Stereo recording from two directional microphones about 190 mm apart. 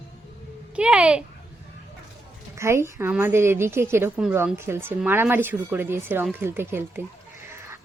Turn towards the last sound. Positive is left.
turn(degrees=-10)  # may be behind; listen again after turning